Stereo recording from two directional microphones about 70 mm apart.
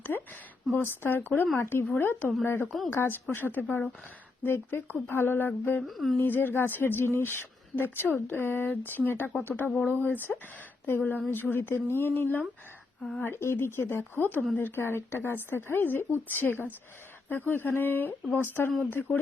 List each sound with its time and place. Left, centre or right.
0.1 s a sound: left
0.8 s speech: left
5.8 s speech: centre
6.1 s speech: left